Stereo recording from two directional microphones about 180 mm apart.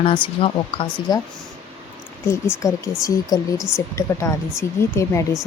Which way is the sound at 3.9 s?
15° left (ahead or behind).